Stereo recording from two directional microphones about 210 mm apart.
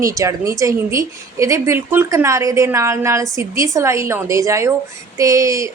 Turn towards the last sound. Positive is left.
turn(degrees=-15)  # may be behind; listen again after turning